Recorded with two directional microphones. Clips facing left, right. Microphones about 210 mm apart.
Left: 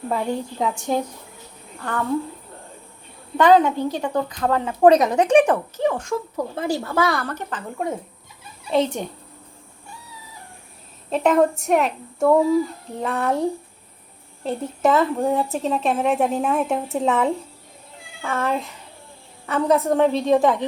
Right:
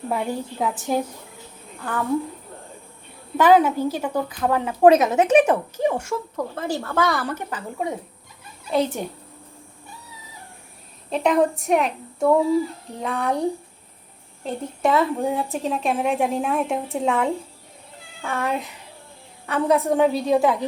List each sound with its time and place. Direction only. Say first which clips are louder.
0.1 s speech: left 2 dB; 5° right (ahead or behind)
3.3 s speech: left 1 dB; 5° right (ahead or behind)
6.3 s speech: left 2 dB; 10° left (ahead or behind)
7.3 s a woman's voice: right 1 dB; 10° right (ahead or behind)
11.1 s a woman's voice: left 2 dB; centre (ahead or behind)
14.8 s a woman's voice: left 1 dB; centre (ahead or behind)